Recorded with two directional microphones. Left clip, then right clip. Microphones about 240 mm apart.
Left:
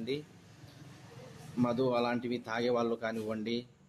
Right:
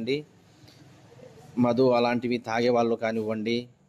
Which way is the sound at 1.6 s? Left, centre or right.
Right.